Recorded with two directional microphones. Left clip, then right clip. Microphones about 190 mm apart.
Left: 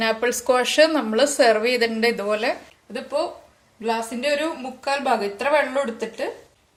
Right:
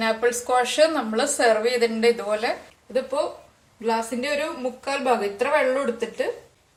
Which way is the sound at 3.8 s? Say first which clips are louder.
Left 1 dB; 30° left (ahead or behind).